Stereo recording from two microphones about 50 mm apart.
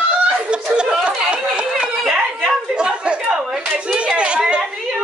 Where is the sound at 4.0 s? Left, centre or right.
Right.